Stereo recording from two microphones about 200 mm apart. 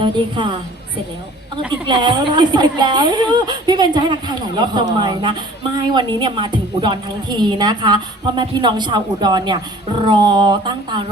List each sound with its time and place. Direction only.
0.0 s speech: 25° right (ahead or behind)
1.9 s speech: 20° right (ahead or behind)